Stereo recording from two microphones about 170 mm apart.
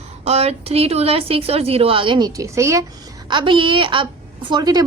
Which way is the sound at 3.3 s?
30° right (ahead or behind).